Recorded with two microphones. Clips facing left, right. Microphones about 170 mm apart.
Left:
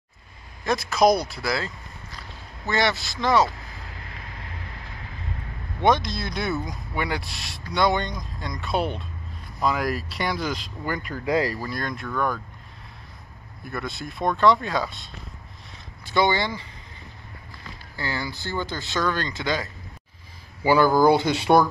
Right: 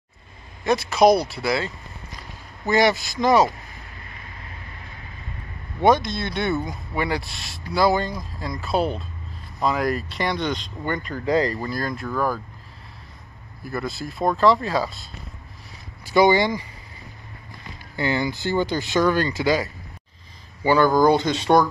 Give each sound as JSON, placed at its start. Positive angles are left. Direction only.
{"t": 0.8, "sound": "speech", "side_deg": -10}
{"t": 1.1, "sound": "speech", "side_deg": -30}
{"t": 1.4, "sound": "speech", "side_deg": -5}
{"t": 2.0, "sound": "a sound", "side_deg": -15}
{"t": 4.0, "sound": "vehicle", "side_deg": 85}
{"t": 5.8, "sound": "speech", "side_deg": -5}
{"t": 13.7, "sound": "speech", "side_deg": 0}
{"t": 16.1, "sound": "speech", "side_deg": -10}
{"t": 17.9, "sound": "speech", "side_deg": -20}
{"t": 20.6, "sound": "speech", "side_deg": 10}